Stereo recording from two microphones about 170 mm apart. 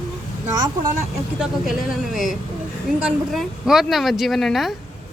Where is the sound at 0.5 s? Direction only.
25° right (ahead or behind).